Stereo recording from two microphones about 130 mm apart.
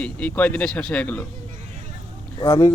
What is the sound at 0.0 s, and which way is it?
Speech, 10° left (ahead or behind).